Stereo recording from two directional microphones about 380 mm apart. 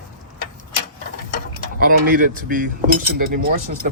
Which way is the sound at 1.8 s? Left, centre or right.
Right.